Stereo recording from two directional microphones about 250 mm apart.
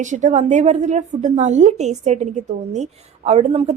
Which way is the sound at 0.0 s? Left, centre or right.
Right.